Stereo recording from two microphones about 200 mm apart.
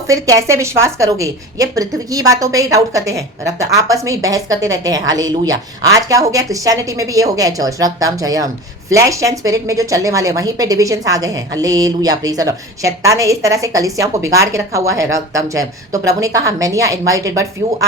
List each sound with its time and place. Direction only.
0.1 s a woman's voice: 15° right (ahead or behind)